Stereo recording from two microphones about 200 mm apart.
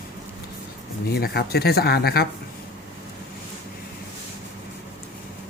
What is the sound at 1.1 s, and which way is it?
Speech, 50° left (ahead or behind).